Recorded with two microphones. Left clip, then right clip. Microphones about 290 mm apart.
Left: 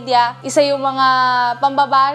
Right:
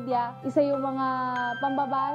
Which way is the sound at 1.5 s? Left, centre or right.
Left.